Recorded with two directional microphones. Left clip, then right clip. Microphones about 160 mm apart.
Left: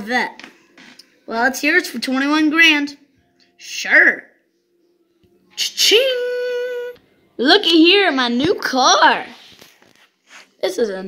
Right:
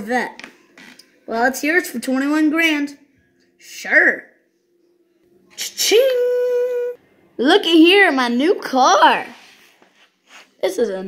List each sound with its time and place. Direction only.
0.4 s music: 75° right (ahead or behind)
1.2 s a woman's voice: centre (ahead or behind)
5.6 s a woman's voice: centre (ahead or behind)
6.7 s humming: 20° left (ahead or behind)
7.3 s a woman's voice: 5° right (ahead or behind)
10.2 s a sound: 15° right (ahead or behind)
10.6 s a woman's voice: 5° right (ahead or behind)